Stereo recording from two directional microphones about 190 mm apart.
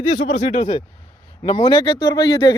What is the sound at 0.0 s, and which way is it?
Speech, 35° left (ahead or behind).